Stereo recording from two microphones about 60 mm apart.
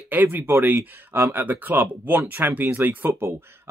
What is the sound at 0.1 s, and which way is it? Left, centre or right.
Speech, right.